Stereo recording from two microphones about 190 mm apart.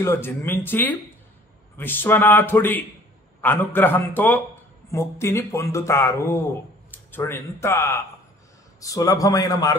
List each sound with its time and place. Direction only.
0.0 s speech: 15° left (ahead or behind)